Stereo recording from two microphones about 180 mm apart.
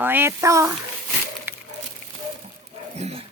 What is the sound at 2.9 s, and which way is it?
Speech, 35° right (ahead or behind).